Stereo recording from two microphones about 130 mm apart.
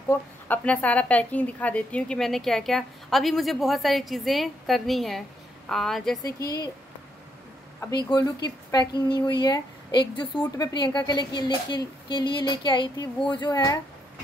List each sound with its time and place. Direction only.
0.1 s a woman's voice: 15° left (ahead or behind)
6.2 s a woman's voice: 25° left (ahead or behind)
8.1 s a woman's voice: 30° left (ahead or behind)